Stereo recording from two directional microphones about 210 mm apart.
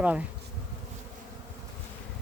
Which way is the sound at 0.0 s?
5° right (ahead or behind).